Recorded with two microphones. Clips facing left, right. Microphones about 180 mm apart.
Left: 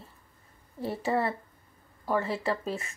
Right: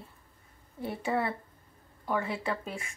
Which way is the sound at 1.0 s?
Centre (ahead or behind).